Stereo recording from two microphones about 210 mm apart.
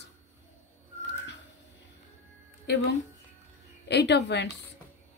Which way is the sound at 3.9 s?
55° left (ahead or behind).